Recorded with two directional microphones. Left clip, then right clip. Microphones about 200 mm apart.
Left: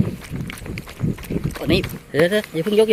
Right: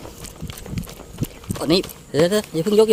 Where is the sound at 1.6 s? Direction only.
15° right (ahead or behind).